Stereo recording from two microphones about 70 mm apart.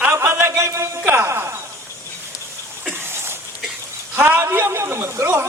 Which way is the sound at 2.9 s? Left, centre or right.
Right.